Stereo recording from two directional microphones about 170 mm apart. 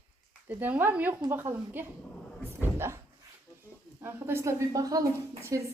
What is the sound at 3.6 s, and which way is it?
A woman's voice, 15° right (ahead or behind).